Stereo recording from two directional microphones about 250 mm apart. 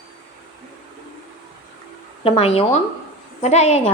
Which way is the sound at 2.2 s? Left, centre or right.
Left.